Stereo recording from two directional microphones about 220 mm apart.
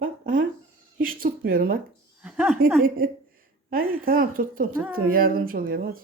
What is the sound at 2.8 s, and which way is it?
Speech, 40° right (ahead or behind).